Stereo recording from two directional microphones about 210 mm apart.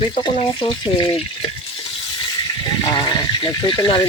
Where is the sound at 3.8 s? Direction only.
25° left (ahead or behind).